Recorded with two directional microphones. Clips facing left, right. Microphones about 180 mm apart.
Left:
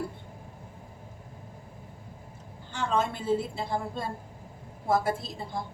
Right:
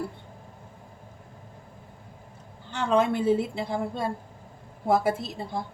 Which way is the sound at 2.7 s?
65° right (ahead or behind).